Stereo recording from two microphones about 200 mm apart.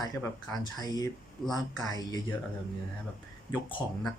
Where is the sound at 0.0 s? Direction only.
20° left (ahead or behind).